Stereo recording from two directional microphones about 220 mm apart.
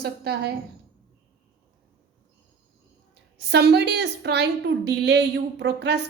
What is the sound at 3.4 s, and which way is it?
A woman's voice, 50° right (ahead or behind).